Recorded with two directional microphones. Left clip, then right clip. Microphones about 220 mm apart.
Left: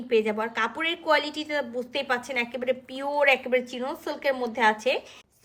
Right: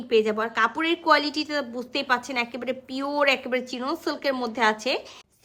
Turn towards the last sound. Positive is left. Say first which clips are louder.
# even
turn(degrees=-25)  # may be behind; listen again after turning